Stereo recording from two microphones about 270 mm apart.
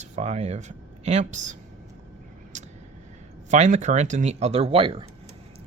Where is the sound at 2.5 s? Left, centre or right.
Right.